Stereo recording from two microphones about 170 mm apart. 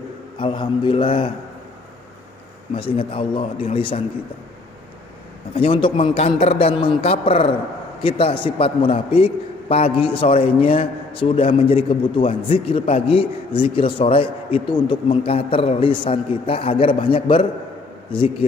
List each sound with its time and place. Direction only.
0.3 s a man's voice: 25° left (ahead or behind)
2.7 s a man's voice: 30° left (ahead or behind)
5.5 s a man's voice: 30° left (ahead or behind)